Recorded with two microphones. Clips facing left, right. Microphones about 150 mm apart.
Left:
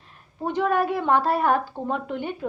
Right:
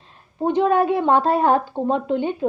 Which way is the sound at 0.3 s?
20° right (ahead or behind).